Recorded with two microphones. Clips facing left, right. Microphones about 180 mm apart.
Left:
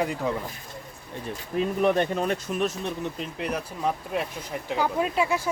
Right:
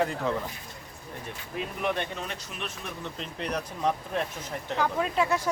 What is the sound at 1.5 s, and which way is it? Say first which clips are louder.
Speech: left 8 dB; 40° left (ahead or behind).